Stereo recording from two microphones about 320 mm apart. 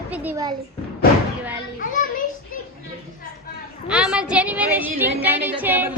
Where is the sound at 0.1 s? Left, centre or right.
Centre.